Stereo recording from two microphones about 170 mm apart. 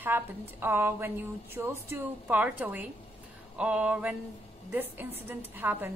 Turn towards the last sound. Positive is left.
turn(degrees=-10)  # may be behind; listen again after turning